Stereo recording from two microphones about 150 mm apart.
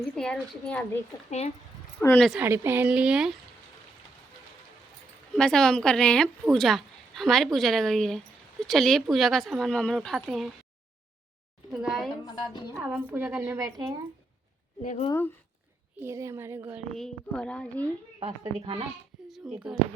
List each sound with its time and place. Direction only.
0.0 s speech: 5° left (ahead or behind)
1.1 s a woman's voice: 20° left (ahead or behind)
2.4 s a woman's voice: 15° right (ahead or behind)
5.4 s speech: 5° left (ahead or behind)
11.7 s speech: centre (ahead or behind)
12.2 s a woman's voice: 25° left (ahead or behind)
12.8 s a woman's voice: 10° right (ahead or behind)
15.1 s speech: 15° left (ahead or behind)
16.0 s a woman's voice: 20° right (ahead or behind)
16.9 s speech: 5° left (ahead or behind)
18.2 s a woman's voice: 35° right (ahead or behind)
19.5 s speech: 5° right (ahead or behind)